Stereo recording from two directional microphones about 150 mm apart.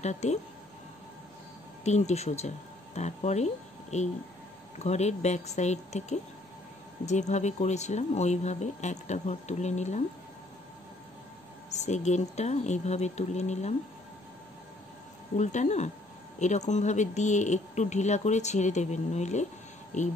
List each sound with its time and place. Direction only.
0.0 s speech: 50° left (ahead or behind)
1.9 s speech: 50° left (ahead or behind)
11.7 s speech: 50° left (ahead or behind)
15.3 s speech: 50° left (ahead or behind)